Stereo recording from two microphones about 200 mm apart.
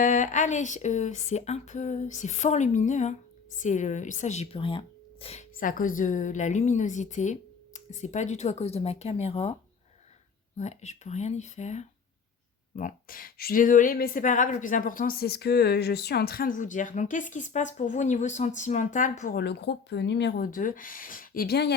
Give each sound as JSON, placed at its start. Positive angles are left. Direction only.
{"t": 0.0, "sound": "speech", "side_deg": 40}
{"t": 5.5, "sound": "speech", "side_deg": 45}
{"t": 10.6, "sound": "speech", "side_deg": 35}
{"t": 19.2, "sound": "speech", "side_deg": 50}